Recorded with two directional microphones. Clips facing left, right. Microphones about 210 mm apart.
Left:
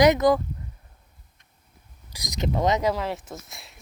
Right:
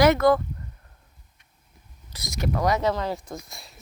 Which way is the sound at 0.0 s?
15° left (ahead or behind).